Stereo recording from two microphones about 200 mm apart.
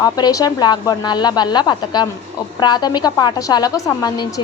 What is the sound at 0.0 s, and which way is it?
A woman's voice, 20° left (ahead or behind).